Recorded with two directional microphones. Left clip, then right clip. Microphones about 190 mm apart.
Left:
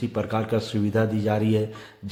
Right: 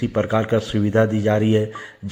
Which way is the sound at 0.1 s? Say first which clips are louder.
Right 7 dB; 15° right (ahead or behind).